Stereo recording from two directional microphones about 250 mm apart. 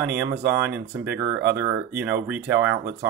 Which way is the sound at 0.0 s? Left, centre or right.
Centre.